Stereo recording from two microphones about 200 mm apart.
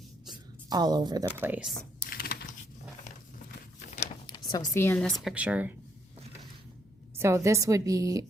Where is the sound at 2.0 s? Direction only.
50° left (ahead or behind).